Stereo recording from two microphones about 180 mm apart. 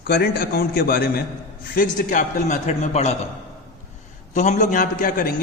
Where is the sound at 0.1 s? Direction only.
60° left (ahead or behind).